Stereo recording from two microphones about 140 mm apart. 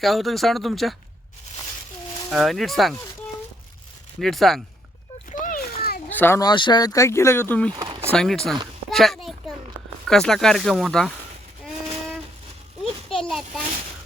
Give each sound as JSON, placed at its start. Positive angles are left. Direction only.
{"t": 0.0, "sound": "speech", "side_deg": 0}
{"t": 2.3, "sound": "speech", "side_deg": 0}
{"t": 4.2, "sound": "speech", "side_deg": 0}
{"t": 5.3, "sound": "a sound", "side_deg": 70}
{"t": 6.1, "sound": "a sound", "side_deg": 15}
{"t": 6.4, "sound": "speech", "side_deg": 35}
{"t": 7.7, "sound": "speech", "side_deg": -30}
{"t": 8.1, "sound": "speech", "side_deg": 5}
{"t": 8.9, "sound": "a sound", "side_deg": 0}
{"t": 10.1, "sound": "speech", "side_deg": 5}
{"t": 12.8, "sound": "children playing", "side_deg": 5}